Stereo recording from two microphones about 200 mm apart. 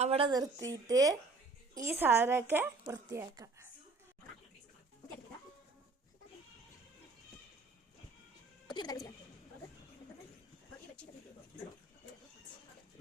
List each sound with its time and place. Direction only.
0.0 s a woman's voice: 30° right (ahead or behind)
8.7 s speech: 20° left (ahead or behind)